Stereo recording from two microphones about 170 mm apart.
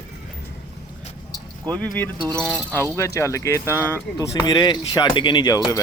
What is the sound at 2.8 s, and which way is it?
Speech, 15° left (ahead or behind).